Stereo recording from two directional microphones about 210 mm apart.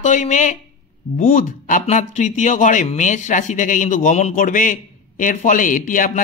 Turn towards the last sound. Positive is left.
turn(degrees=40)  # may be behind; listen again after turning